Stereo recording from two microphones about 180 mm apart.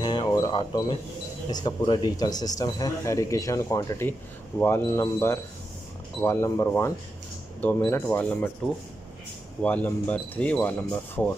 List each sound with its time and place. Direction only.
0.0 s a sound: 25° left (ahead or behind)
1.5 s speech: 20° left (ahead or behind)
9.6 s speech: 10° left (ahead or behind)